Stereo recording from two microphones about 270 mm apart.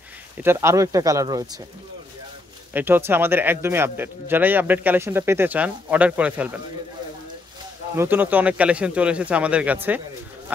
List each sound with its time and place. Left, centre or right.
0.4 s speech: centre
2.7 s speech: centre
7.9 s speech: centre